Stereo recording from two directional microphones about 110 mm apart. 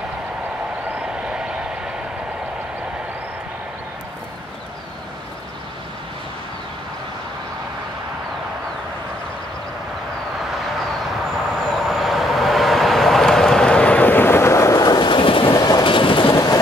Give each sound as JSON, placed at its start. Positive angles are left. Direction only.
{"t": 0.8, "sound": "vehicle", "side_deg": -10}
{"t": 10.4, "sound": "vehicle", "side_deg": 0}
{"t": 11.7, "sound": "vehicle", "side_deg": 0}
{"t": 15.5, "sound": "train", "side_deg": 40}